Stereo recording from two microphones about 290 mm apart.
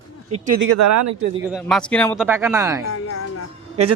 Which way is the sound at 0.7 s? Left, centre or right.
Right.